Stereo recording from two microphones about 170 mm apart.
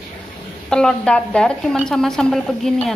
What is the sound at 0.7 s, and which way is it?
A woman's voice, 5° left (ahead or behind).